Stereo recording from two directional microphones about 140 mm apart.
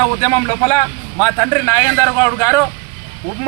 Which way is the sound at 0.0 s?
15° left (ahead or behind).